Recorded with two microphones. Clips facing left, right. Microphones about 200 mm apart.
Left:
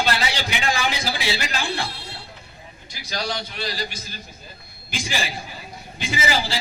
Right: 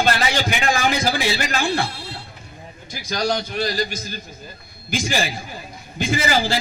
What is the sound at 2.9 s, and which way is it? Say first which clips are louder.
A man's voice: right 6 dB; 45° right (ahead or behind).